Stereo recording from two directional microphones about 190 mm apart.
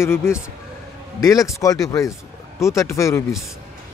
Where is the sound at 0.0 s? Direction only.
15° left (ahead or behind).